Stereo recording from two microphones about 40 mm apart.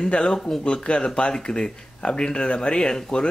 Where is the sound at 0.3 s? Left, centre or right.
Centre.